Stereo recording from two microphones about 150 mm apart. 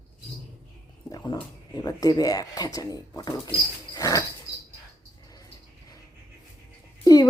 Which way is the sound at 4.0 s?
25° left (ahead or behind).